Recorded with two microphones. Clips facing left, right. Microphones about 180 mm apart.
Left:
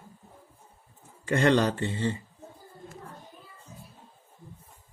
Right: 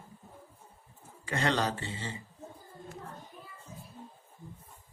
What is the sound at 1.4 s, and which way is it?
Speech, 55° left (ahead or behind).